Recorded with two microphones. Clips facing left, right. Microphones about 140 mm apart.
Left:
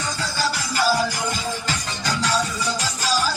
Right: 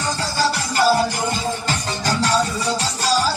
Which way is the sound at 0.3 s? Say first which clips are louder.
Right 4 dB; 35° right (ahead or behind).